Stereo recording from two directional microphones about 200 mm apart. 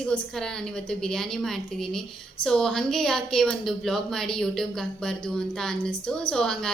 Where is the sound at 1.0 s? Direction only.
5° left (ahead or behind).